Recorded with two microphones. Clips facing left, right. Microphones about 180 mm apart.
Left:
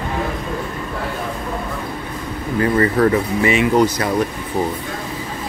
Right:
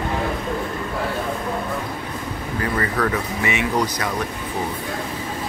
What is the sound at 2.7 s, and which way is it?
Speech, 30° left (ahead or behind).